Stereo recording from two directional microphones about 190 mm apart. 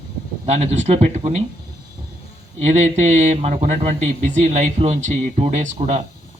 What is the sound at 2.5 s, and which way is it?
Speech, 35° right (ahead or behind).